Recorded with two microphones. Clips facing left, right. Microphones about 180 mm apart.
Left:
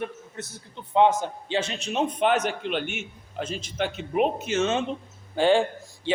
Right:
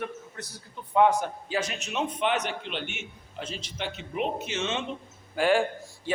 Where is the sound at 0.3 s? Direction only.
25° left (ahead or behind); by 4.9 s 40° left (ahead or behind).